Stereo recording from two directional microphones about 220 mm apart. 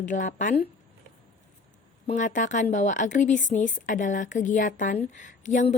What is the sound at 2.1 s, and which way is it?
A woman's voice, 35° left (ahead or behind).